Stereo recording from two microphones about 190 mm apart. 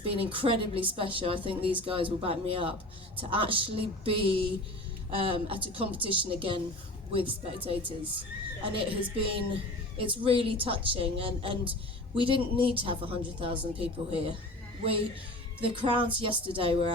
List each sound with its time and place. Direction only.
0.0 s a woman's voice: 30° right (ahead or behind)
15.6 s a woman's voice: 25° right (ahead or behind)